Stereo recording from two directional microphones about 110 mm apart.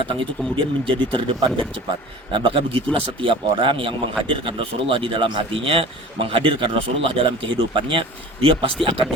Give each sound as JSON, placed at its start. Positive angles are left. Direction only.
{"t": 0.0, "sound": "speech", "side_deg": -50}